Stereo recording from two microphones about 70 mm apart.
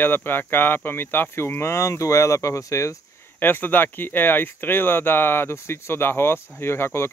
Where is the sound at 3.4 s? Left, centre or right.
Left.